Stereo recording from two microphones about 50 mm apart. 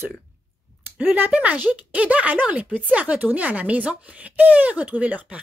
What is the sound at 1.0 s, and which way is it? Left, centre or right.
Speech, right.